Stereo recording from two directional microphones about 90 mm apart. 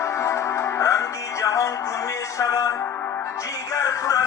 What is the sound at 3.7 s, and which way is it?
Music, 40° left (ahead or behind).